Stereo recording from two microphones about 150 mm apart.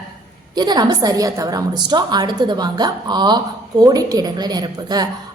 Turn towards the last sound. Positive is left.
turn(degrees=-25)  # may be behind; listen again after turning